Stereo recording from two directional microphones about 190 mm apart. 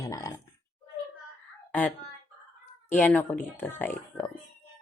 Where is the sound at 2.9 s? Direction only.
10° left (ahead or behind).